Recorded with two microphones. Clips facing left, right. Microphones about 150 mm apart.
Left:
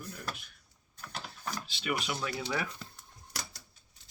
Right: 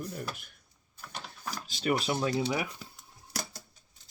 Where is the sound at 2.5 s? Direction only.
15° right (ahead or behind).